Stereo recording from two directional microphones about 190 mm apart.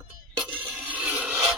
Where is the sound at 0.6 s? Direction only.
10° right (ahead or behind).